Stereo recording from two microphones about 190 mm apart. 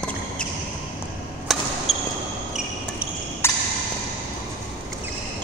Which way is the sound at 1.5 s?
Centre (ahead or behind).